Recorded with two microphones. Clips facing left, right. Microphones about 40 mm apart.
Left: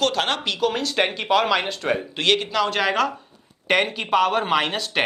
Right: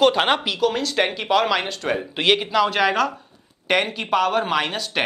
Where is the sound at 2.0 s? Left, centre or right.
Centre.